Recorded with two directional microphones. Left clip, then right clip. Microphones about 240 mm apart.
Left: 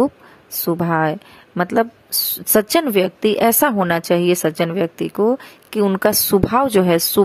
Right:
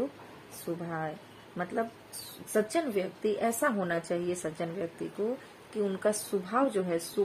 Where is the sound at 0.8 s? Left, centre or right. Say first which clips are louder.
Left 18 dB; left.